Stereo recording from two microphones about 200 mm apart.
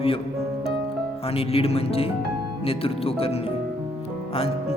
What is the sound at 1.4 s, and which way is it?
Speech, 30° left (ahead or behind).